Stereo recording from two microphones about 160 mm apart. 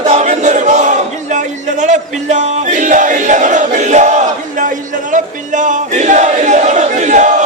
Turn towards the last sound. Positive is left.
turn(degrees=-50)  # may be behind; listen again after turning